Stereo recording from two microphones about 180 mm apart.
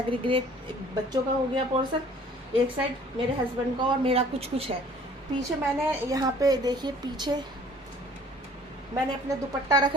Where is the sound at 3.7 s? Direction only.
30° right (ahead or behind).